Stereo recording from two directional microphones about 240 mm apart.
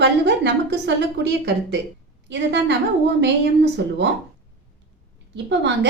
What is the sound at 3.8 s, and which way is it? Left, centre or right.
Speech, right.